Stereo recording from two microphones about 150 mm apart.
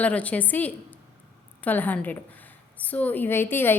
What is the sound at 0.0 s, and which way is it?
A woman's voice, 10° left (ahead or behind).